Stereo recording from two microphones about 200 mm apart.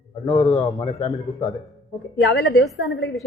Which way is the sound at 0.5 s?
30° left (ahead or behind).